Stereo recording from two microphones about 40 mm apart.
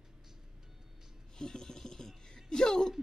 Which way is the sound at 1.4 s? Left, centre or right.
Centre.